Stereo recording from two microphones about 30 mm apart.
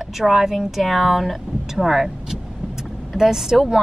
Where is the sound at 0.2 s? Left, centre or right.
Centre.